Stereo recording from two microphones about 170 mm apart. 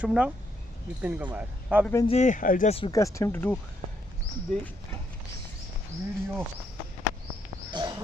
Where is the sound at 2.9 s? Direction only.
20° left (ahead or behind).